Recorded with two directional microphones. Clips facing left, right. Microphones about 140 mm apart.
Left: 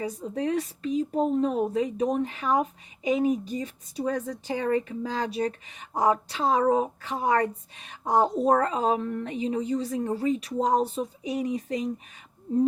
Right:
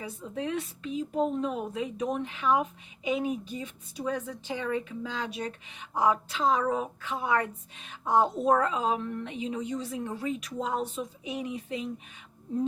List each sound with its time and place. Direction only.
0.2 s speech: 40° left (ahead or behind)